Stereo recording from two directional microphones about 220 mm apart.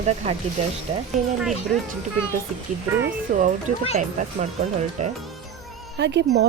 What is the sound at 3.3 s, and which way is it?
Speech, 40° right (ahead or behind).